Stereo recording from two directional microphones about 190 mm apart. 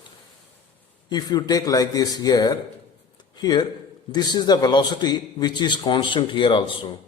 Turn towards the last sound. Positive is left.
turn(degrees=25)  # may be behind; listen again after turning